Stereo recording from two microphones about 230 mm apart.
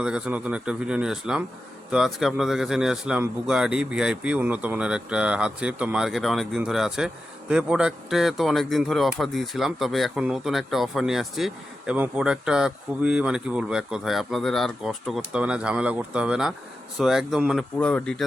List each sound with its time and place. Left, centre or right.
0.0 s speech: centre